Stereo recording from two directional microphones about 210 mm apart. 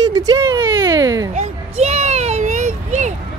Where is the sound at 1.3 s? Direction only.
30° right (ahead or behind).